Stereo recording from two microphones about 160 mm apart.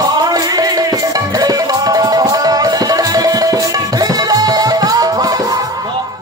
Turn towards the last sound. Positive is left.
turn(degrees=-25)  # may be behind; listen again after turning